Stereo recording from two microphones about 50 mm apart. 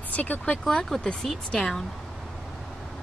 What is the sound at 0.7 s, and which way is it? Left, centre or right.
Speech, centre.